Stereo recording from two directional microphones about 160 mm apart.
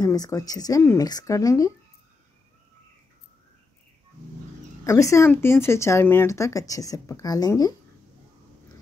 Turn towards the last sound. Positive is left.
turn(degrees=20)  # may be behind; listen again after turning